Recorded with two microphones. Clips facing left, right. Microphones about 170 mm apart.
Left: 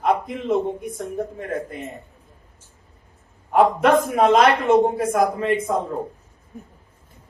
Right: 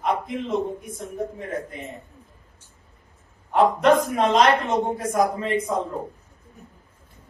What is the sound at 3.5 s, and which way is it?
A man's voice, centre (ahead or behind).